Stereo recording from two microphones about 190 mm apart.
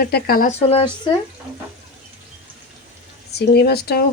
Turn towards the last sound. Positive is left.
turn(degrees=55)  # may be behind; listen again after turning